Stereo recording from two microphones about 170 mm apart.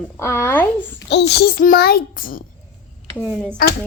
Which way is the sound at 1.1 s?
70° left (ahead or behind).